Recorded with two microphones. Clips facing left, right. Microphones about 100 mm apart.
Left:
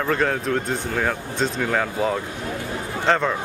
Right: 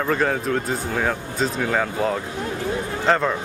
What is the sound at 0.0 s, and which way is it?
Speech, centre (ahead or behind).